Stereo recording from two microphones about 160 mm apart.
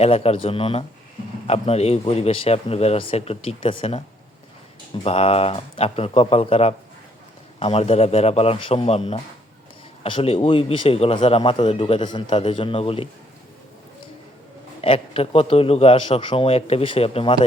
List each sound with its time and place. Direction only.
0.0 s speech: 40° left (ahead or behind)
5.0 s speech: 40° left (ahead or behind)
14.8 s speech: 40° left (ahead or behind)